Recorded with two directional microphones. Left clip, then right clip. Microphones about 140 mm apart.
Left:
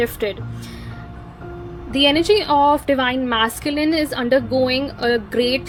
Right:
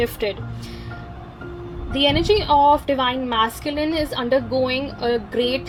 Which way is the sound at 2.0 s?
25° left (ahead or behind).